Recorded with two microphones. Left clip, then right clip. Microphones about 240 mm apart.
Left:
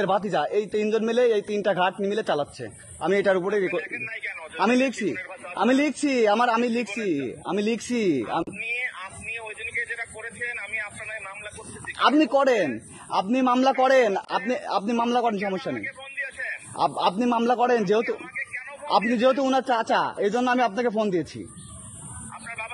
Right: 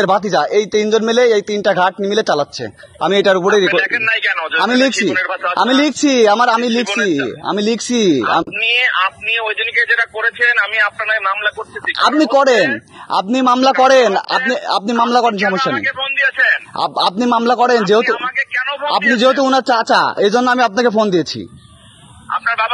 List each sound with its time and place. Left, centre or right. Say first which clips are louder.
0.0 s a man's voice: right 10 dB; right
3.5 s a man's voice: right 13 dB; right
4.6 s a man's voice: right 7 dB; right
5.1 s a man's voice: right 18 dB; right
5.6 s a man's voice: right 8 dB; right
8.2 s a man's voice: right 13 dB; right
12.0 s a man's voice: right 8 dB; right
16.7 s a man's voice: right 7 dB; right
18.0 s a man's voice: right 14 dB; right
19.1 s speech: right 9 dB; right